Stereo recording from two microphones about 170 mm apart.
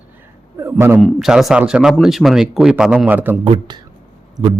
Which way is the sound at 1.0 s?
Centre (ahead or behind).